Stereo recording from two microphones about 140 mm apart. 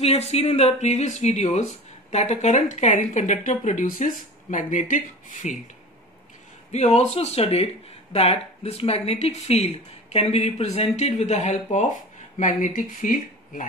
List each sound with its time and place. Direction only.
0.0 s speech: 50° left (ahead or behind)
6.7 s speech: 55° left (ahead or behind); by 13.7 s 70° left (ahead or behind)